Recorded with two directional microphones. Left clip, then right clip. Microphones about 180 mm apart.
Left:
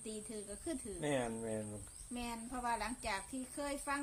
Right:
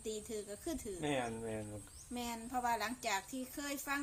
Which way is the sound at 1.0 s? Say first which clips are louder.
Left 1 dB; 30° left (ahead or behind).